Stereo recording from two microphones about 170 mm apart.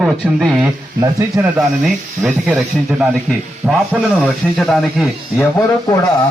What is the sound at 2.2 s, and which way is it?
Speech, centre (ahead or behind).